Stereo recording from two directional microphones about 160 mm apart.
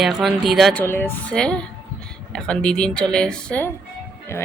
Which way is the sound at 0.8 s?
15° left (ahead or behind).